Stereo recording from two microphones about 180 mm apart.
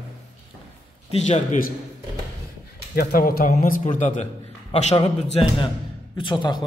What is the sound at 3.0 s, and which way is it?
Speech, 55° left (ahead or behind).